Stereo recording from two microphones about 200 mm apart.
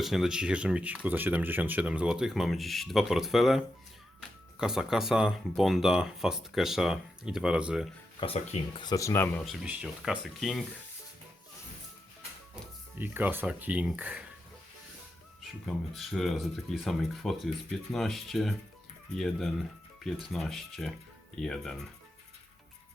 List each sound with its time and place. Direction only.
0.0 s speech: centre (ahead or behind)
8.8 s speech: 15° left (ahead or behind)
9.4 s speech: centre (ahead or behind)
13.0 s speech: 10° right (ahead or behind)
15.6 s speech: centre (ahead or behind)